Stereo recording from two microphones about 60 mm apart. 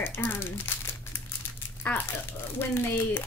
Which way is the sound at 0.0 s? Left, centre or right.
Left.